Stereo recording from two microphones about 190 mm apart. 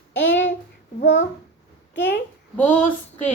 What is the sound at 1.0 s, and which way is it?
A child's voice, 75° left (ahead or behind).